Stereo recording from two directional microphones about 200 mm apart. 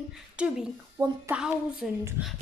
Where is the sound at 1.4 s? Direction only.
5° right (ahead or behind).